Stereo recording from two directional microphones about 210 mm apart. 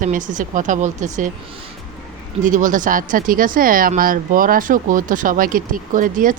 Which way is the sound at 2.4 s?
35° right (ahead or behind).